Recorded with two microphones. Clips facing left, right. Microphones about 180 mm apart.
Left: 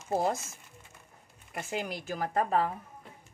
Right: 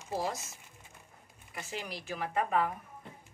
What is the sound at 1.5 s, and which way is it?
Speech, 50° left (ahead or behind).